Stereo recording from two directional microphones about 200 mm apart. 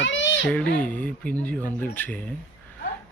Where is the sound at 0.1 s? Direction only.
65° left (ahead or behind).